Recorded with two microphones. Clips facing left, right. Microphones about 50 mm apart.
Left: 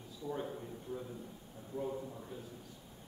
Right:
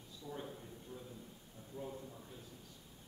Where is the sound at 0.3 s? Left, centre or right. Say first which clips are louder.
Left 6 dB; centre.